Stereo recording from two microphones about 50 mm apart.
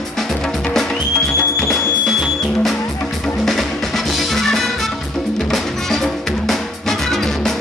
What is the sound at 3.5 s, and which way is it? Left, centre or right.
Music, centre.